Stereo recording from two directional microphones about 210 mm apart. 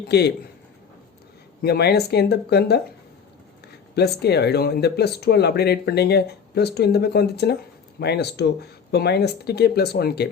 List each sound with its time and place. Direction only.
0.1 s speech: 50° left (ahead or behind)
1.6 s speech: 50° left (ahead or behind)
3.9 s speech: 50° left (ahead or behind)